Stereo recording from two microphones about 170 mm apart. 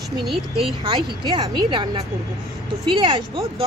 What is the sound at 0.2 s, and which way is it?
Speech, centre (ahead or behind).